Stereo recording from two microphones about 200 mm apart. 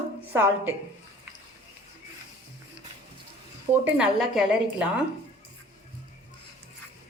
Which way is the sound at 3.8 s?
5° right (ahead or behind).